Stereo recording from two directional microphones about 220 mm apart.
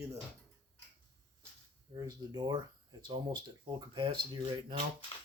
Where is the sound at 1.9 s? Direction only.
15° right (ahead or behind).